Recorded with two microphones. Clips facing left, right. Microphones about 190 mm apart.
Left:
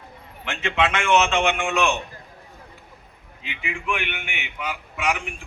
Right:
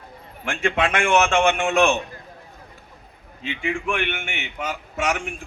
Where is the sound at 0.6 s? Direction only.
45° right (ahead or behind).